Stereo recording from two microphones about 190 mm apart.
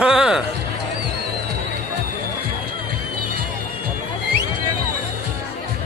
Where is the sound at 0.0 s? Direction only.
5° right (ahead or behind).